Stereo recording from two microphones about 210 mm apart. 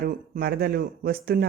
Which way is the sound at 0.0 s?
45° right (ahead or behind).